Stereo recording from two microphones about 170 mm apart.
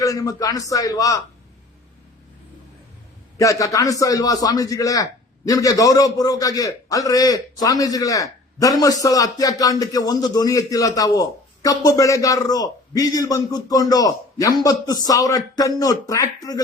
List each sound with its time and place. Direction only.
0.0 s a man's voice: 20° left (ahead or behind)
3.3 s a man's voice: 20° left (ahead or behind)